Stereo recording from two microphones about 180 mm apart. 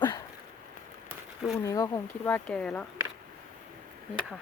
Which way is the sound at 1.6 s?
20° left (ahead or behind).